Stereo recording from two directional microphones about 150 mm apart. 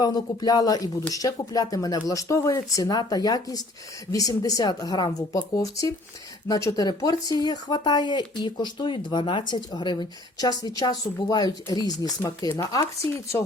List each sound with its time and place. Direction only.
0.0 s speech: 25° left (ahead or behind)